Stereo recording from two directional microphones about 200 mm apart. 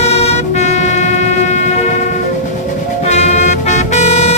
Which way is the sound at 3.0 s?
35° left (ahead or behind).